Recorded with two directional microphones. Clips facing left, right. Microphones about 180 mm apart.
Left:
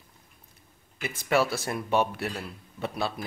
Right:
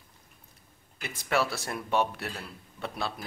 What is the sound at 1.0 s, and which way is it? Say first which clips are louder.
Speech: left 4 dB; centre (ahead or behind).